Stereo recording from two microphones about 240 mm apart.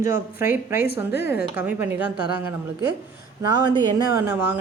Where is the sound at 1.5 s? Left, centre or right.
Centre.